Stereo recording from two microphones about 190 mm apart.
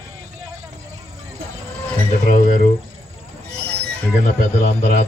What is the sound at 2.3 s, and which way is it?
Speech, 45° left (ahead or behind).